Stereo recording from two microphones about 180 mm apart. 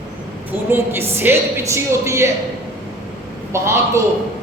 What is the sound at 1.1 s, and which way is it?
A woman's voice, 15° right (ahead or behind).